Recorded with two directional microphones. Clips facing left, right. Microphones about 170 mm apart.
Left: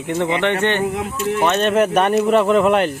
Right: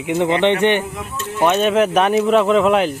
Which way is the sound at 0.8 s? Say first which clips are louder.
Left 7 dB; 65° left (ahead or behind).